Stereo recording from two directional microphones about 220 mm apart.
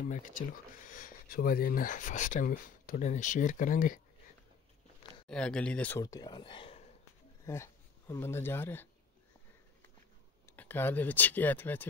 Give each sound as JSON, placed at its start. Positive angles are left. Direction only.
{"t": 0.0, "sound": "speech", "side_deg": 35}
{"t": 5.3, "sound": "speech", "side_deg": 5}
{"t": 7.4, "sound": "speech", "side_deg": 10}
{"t": 10.4, "sound": "speech", "side_deg": 10}